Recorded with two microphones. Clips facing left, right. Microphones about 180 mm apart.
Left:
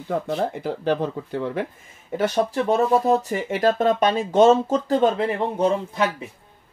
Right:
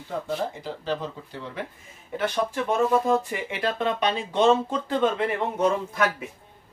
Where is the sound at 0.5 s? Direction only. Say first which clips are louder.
Left 7 dB; 60° left (ahead or behind).